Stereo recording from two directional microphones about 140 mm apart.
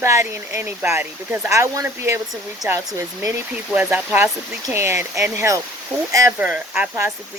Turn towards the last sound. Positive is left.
turn(degrees=-15)  # may be behind; listen again after turning